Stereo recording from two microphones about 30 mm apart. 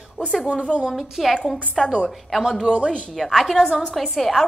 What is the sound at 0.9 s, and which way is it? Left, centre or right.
Speech, centre.